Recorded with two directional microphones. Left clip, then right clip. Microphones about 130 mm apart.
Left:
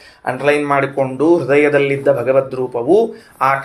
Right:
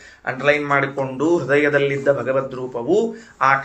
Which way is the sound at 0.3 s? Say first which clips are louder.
Left 3 dB; 40° left (ahead or behind).